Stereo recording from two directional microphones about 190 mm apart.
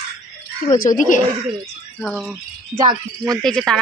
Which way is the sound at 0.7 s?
45° left (ahead or behind).